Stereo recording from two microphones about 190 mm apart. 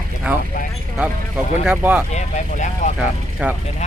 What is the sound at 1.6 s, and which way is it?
Speech, 5° right (ahead or behind).